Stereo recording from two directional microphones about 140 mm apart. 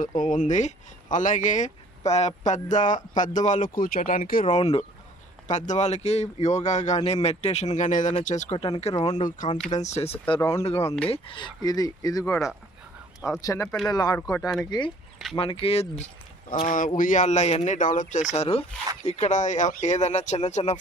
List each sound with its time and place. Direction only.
0.0 s speech: 65° left (ahead or behind); by 4.5 s 85° left
4.5 s speech: 50° left (ahead or behind)
9.4 s speech: 65° left (ahead or behind)
9.8 s speech: 50° left (ahead or behind)
10.8 s speech: 20° left (ahead or behind)
11.1 s speech: 35° left (ahead or behind)
15.3 s speech: 40° left (ahead or behind)
16.6 s speech: 70° left (ahead or behind)